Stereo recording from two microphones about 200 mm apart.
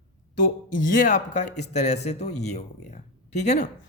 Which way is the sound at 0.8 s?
40° left (ahead or behind).